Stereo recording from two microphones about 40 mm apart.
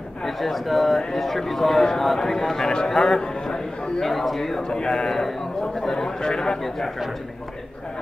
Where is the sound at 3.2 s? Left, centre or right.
Centre.